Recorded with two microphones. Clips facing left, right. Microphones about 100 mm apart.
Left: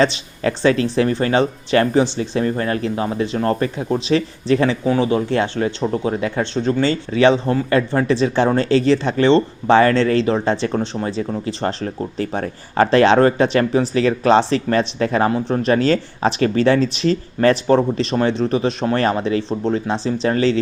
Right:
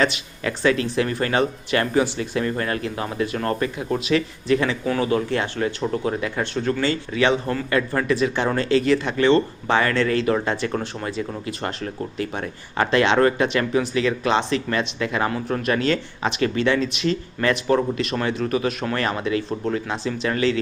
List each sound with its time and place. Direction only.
0.0 s speech: 30° left (ahead or behind)